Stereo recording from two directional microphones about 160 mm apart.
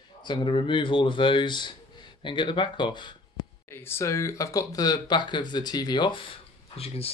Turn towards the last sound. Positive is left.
turn(degrees=40)  # may be behind; listen again after turning